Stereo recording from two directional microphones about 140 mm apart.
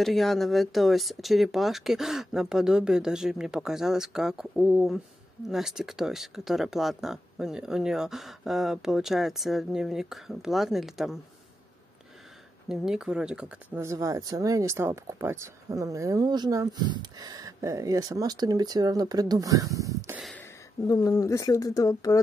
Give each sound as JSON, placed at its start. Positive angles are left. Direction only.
{"t": 0.0, "sound": "speech", "side_deg": 0}
{"t": 12.6, "sound": "speech", "side_deg": -5}
{"t": 13.7, "sound": "speech", "side_deg": -25}
{"t": 20.8, "sound": "speech", "side_deg": 25}